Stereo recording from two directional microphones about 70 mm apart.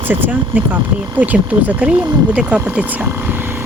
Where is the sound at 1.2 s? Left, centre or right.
Centre.